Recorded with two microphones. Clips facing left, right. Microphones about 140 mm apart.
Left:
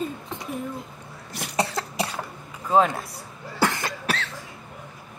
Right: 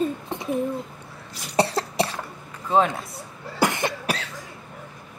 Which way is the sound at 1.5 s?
35° right (ahead or behind).